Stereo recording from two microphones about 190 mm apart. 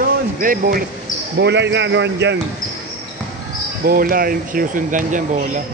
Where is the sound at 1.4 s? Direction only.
65° right (ahead or behind).